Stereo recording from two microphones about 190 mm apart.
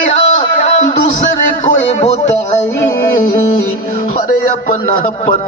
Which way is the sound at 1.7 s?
40° left (ahead or behind).